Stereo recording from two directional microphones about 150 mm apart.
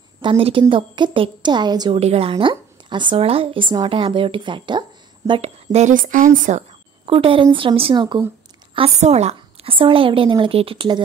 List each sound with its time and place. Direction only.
0.2 s a woman's voice: 35° right (ahead or behind)
2.0 s a woman's voice: 40° right (ahead or behind)
5.4 s speech: 45° right (ahead or behind)
7.1 s a woman's voice: 35° right (ahead or behind)
8.7 s a woman's voice: 45° right (ahead or behind)